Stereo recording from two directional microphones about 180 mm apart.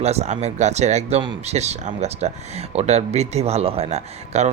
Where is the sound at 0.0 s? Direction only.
35° right (ahead or behind).